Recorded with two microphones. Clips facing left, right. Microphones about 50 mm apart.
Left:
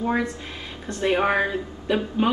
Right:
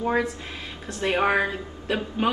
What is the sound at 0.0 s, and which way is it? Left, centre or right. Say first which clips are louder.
A man's voice: even; centre.